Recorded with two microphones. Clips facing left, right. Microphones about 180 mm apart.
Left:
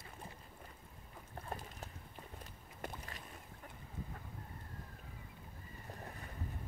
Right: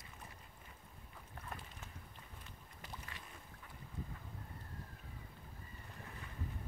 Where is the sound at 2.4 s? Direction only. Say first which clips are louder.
Left 8 dB; 40° left (ahead or behind).